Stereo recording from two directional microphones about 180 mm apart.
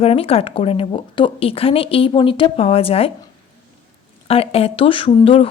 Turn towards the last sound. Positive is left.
turn(degrees=30)  # may be behind; listen again after turning